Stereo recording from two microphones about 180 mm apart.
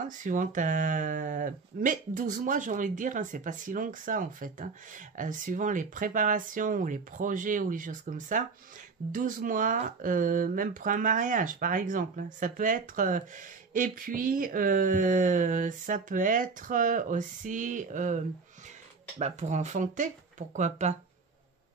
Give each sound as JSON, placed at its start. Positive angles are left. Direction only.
{"t": 0.2, "sound": "speech", "side_deg": -45}